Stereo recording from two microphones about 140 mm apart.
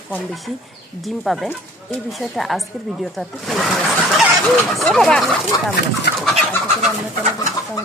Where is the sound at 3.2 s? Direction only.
Centre (ahead or behind).